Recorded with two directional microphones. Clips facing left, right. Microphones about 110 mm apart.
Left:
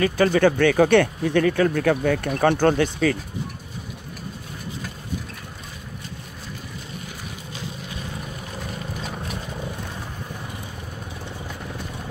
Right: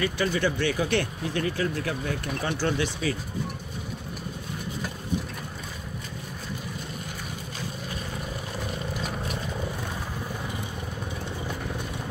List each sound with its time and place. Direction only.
0.0 s speech: 55° left (ahead or behind)